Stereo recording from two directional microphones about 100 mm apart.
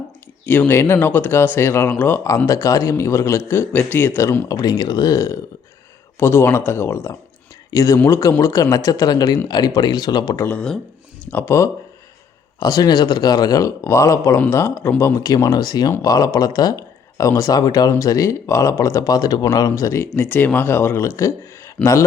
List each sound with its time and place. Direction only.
0.4 s speech: 20° left (ahead or behind)
2.5 s speech: 35° left (ahead or behind)
4.4 s speech: 40° left (ahead or behind)
11.3 s speech: 20° left (ahead or behind)
12.5 s speech: 40° left (ahead or behind)